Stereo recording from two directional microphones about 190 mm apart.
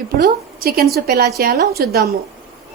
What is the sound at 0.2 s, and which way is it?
A woman's voice, 55° right (ahead or behind).